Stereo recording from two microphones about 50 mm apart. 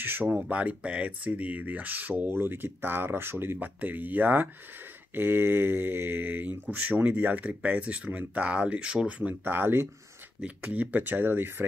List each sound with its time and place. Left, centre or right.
0.4 s speech: right
2.3 s speech: right
3.5 s speech: right
5.1 s speech: right
9.4 s speech: right
10.4 s speech: right